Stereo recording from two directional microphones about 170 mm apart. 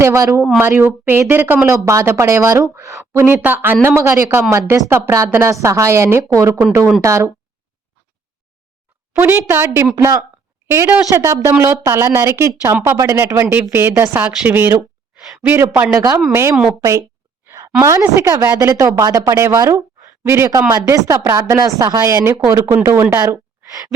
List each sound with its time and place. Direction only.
0.0 s a woman's voice: 15° right (ahead or behind)
9.1 s a woman's voice: 15° right (ahead or behind)
15.2 s a sound: centre (ahead or behind)
15.5 s a woman's voice: 15° right (ahead or behind)